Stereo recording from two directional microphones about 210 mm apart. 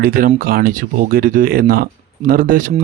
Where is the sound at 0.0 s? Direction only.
45° right (ahead or behind).